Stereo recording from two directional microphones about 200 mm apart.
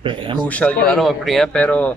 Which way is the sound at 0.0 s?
25° right (ahead or behind).